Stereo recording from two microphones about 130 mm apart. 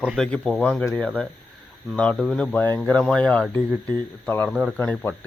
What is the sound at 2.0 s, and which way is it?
A man's voice, 5° left (ahead or behind).